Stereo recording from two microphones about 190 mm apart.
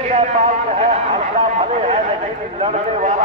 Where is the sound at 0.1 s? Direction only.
35° right (ahead or behind).